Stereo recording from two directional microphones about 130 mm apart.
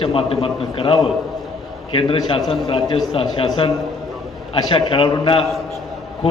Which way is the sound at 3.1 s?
45° left (ahead or behind).